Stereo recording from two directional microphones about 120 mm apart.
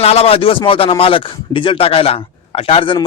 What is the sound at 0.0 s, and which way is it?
Speech, 60° left (ahead or behind).